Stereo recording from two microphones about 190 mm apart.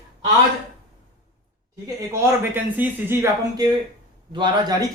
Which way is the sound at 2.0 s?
15° right (ahead or behind).